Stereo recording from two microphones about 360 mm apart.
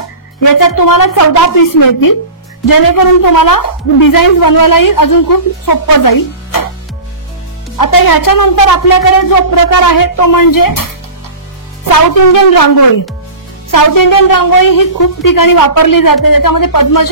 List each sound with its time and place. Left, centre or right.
0.4 s a woman's voice: left
7.7 s a woman's voice: left